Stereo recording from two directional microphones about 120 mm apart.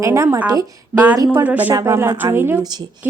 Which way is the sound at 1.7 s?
20° right (ahead or behind).